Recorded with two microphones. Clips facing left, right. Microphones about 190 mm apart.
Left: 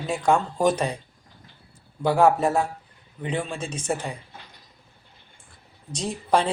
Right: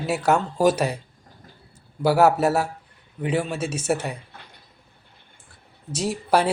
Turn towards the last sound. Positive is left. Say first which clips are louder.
# right 2 dB
turn(degrees=-5)  # may be behind; listen again after turning